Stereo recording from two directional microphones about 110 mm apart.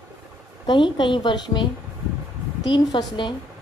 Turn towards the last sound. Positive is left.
turn(degrees=35)  # may be behind; listen again after turning